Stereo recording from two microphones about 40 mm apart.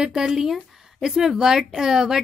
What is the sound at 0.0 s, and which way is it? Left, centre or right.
A woman's voice, centre.